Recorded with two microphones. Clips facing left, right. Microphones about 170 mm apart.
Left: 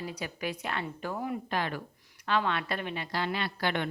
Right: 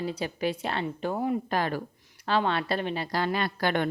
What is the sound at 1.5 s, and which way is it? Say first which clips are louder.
A woman's voice: right 4 dB; 40° right (ahead or behind).